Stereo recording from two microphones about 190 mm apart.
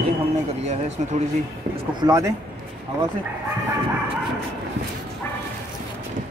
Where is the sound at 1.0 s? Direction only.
40° right (ahead or behind).